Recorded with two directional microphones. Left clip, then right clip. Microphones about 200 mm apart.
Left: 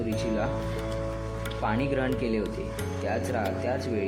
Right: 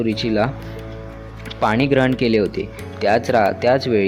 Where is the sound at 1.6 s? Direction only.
50° right (ahead or behind).